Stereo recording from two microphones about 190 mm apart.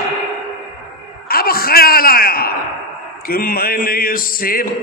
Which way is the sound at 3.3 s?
50° left (ahead or behind).